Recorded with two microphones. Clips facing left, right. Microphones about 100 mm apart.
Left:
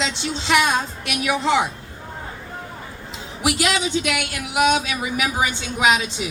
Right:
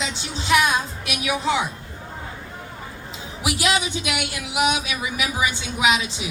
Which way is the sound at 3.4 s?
60° left (ahead or behind).